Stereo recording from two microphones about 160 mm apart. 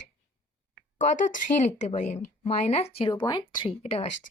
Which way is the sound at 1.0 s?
55° left (ahead or behind).